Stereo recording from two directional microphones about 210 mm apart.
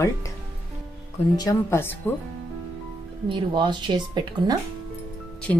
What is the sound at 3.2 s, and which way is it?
Speech, 20° right (ahead or behind).